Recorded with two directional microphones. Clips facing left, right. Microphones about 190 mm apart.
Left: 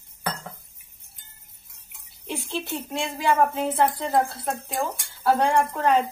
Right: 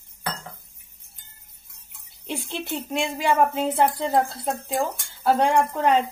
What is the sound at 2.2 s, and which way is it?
Speech, 20° right (ahead or behind).